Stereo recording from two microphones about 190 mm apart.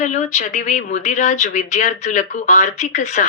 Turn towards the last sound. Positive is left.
turn(degrees=40)  # may be behind; listen again after turning